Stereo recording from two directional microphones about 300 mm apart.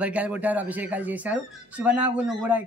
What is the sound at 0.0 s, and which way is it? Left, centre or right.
Speech, centre.